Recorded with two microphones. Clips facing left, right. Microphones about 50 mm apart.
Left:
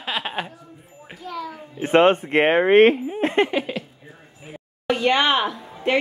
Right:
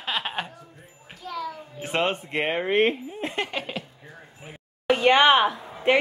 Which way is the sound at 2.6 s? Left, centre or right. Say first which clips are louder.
Left 8 dB; left.